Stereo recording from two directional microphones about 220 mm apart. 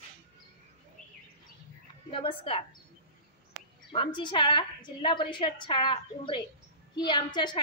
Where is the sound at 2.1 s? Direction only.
25° left (ahead or behind).